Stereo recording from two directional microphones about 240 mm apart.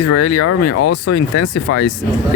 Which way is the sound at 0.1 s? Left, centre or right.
Left.